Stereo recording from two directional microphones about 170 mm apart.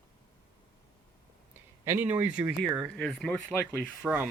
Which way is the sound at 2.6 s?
Centre (ahead or behind).